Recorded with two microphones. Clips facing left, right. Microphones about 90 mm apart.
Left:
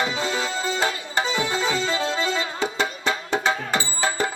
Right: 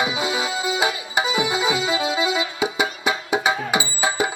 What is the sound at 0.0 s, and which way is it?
Music, 10° right (ahead or behind).